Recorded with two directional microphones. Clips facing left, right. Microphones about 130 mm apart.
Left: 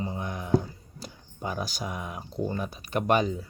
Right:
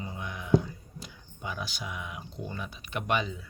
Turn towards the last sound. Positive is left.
turn(degrees=40)  # may be behind; listen again after turning